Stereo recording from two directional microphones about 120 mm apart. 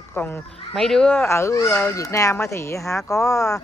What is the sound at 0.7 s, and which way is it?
Speech, 5° left (ahead or behind).